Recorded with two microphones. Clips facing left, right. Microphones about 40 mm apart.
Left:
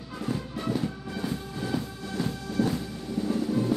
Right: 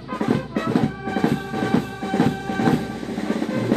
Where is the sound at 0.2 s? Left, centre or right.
Right.